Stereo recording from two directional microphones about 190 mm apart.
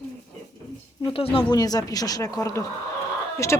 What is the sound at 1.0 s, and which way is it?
Speech, 30° left (ahead or behind).